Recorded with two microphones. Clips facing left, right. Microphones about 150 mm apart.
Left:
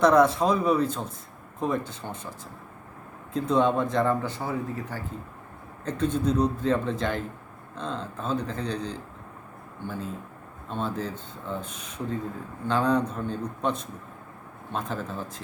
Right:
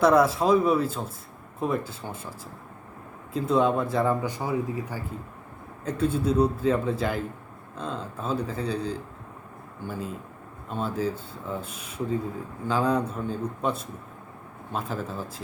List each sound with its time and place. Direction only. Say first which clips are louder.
0.0 s speech: even; 5° right (ahead or behind)
3.3 s speech: even; 5° right (ahead or behind)